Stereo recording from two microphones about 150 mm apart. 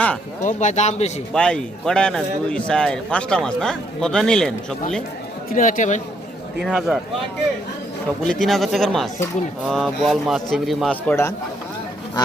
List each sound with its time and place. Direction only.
0.4 s speech: 50° left (ahead or behind)
1.3 s speech: 5° left (ahead or behind)
5.5 s speech: 60° left (ahead or behind)
6.7 s speech: 5° right (ahead or behind)
8.2 s speech: 5° left (ahead or behind)
11.1 s speech: 15° left (ahead or behind)